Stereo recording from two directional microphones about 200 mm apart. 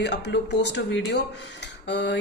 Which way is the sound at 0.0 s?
60° left (ahead or behind).